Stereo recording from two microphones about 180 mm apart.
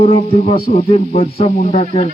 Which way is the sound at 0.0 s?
35° left (ahead or behind).